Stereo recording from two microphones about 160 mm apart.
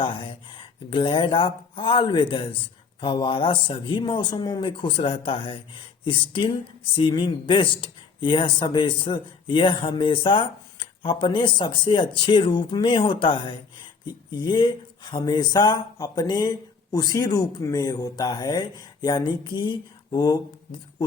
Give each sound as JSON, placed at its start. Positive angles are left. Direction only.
{"t": 0.0, "sound": "speech", "side_deg": 30}